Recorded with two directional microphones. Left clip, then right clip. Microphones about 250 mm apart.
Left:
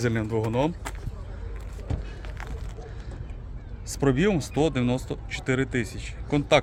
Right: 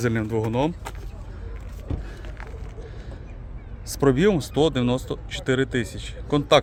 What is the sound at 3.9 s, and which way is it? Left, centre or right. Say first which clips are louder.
Speech: right 4 dB; centre.